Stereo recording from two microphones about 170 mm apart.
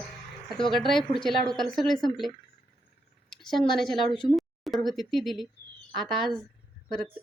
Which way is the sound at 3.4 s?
Centre (ahead or behind).